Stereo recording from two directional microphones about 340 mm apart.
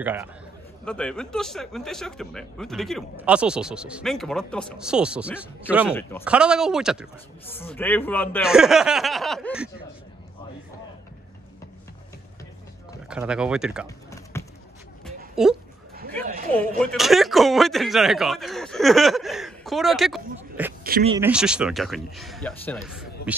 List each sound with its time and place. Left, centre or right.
0.0 s speech: centre
13.1 s speech: centre
13.8 s music: centre
15.4 s speech: centre
16.5 s speech: centre
20.8 s speech: right
21.1 s speech: centre